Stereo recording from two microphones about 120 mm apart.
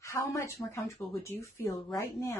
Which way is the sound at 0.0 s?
25° left (ahead or behind).